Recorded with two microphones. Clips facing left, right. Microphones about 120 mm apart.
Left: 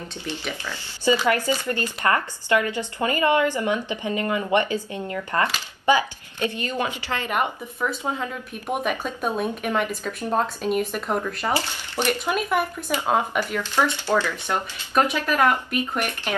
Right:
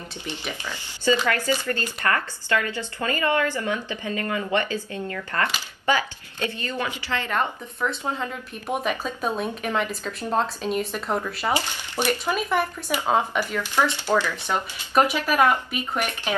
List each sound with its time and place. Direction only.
0.2 s speech: 15° right (ahead or behind)
1.2 s a woman's voice: 20° left (ahead or behind); by 11.5 s 5° right (ahead or behind)
11.5 s speech: 15° right (ahead or behind)
12.1 s a woman's voice: 10° left (ahead or behind)
14.1 s speech: 10° right (ahead or behind)